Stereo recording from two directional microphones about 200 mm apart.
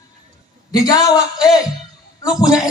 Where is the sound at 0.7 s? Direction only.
20° left (ahead or behind).